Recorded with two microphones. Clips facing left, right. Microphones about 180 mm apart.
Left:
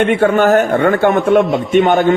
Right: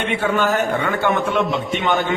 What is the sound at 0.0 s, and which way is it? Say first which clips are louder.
A man's voice: left 8 dB; 50° left (ahead or behind).